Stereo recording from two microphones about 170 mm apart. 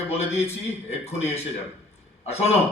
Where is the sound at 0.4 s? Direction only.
40° left (ahead or behind).